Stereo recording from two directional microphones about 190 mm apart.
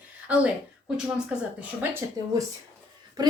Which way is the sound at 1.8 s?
10° right (ahead or behind).